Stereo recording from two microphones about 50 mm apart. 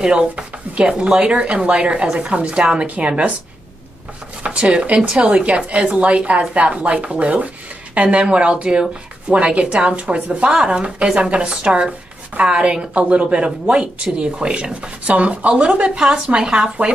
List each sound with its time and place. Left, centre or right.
0.0 s a woman's voice: centre
4.5 s a woman's voice: centre